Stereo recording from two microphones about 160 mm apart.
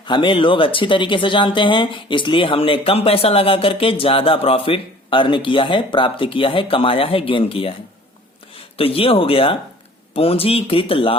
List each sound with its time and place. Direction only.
0.0 s speech: 30° left (ahead or behind)